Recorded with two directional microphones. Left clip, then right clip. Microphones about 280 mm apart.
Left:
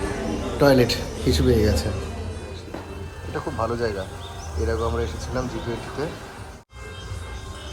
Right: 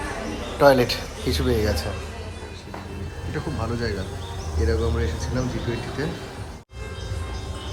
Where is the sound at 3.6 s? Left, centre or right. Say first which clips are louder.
Left 6 dB; centre.